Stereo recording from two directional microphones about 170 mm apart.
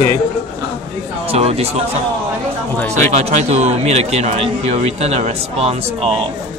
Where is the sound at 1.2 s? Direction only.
35° right (ahead or behind).